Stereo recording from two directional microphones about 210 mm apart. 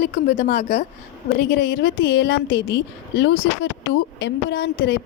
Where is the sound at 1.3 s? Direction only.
55° left (ahead or behind).